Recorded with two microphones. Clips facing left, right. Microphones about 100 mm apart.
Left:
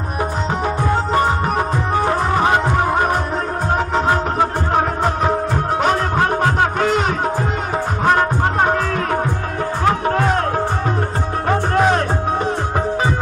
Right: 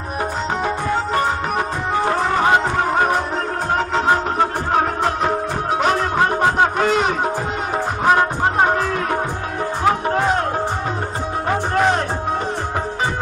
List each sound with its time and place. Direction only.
2.0 s music: 10° left (ahead or behind)
4.1 s music: 5° left (ahead or behind)
6.1 s music: 5° right (ahead or behind)
11.4 s music: centre (ahead or behind)